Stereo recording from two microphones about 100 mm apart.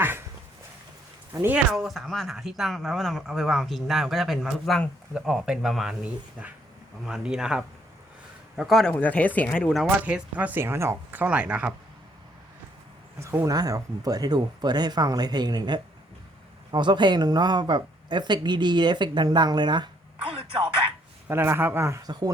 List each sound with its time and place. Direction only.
0.0 s dog: 20° right (ahead or behind)
1.3 s speech: 25° right (ahead or behind)
1.5 s speech: 5° right (ahead or behind)
6.4 s speech: 10° right (ahead or behind)
8.9 s speech: 15° left (ahead or behind)
10.1 s speech: 15° right (ahead or behind)
13.1 s speech: 30° right (ahead or behind); by 20.7 s 50° right (ahead or behind)
21.2 s speech: 25° right (ahead or behind)